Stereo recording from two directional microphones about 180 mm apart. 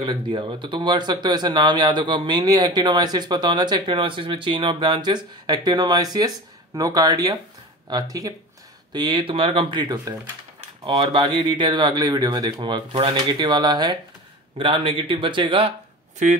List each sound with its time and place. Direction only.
0.0 s a man's voice: 25° right (ahead or behind)